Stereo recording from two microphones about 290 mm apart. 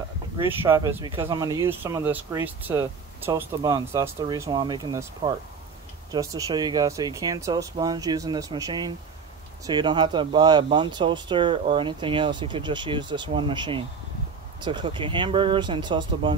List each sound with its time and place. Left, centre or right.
0.6 s speech: centre